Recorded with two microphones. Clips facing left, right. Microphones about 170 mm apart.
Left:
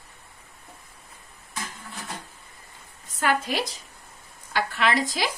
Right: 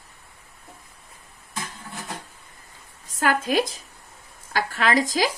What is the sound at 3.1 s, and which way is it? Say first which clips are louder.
A woman's voice: right 3 dB; 40° right (ahead or behind).